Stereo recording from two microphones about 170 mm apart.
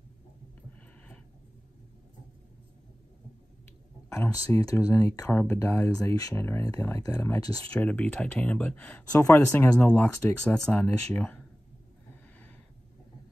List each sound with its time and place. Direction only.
4.1 s speech: 15° left (ahead or behind)
7.7 s speech: 10° left (ahead or behind)